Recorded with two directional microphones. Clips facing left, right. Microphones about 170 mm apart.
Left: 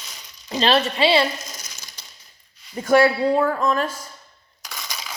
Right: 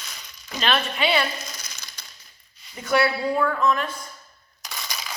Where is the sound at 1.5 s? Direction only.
45° left (ahead or behind).